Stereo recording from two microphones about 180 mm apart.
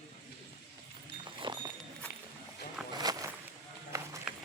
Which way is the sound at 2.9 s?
20° right (ahead or behind).